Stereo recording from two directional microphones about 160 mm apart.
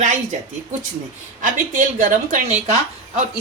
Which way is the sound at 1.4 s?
55° right (ahead or behind).